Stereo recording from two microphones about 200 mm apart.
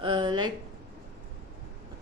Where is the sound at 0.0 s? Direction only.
25° right (ahead or behind).